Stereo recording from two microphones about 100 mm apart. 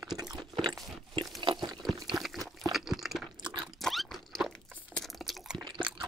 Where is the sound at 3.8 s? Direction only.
5° left (ahead or behind).